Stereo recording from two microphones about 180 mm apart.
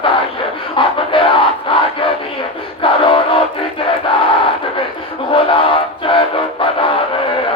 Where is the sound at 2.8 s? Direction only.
30° left (ahead or behind).